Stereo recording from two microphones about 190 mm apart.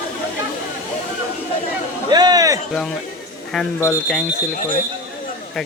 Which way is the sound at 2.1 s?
20° right (ahead or behind).